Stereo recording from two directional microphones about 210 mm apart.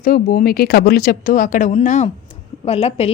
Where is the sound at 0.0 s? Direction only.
45° left (ahead or behind).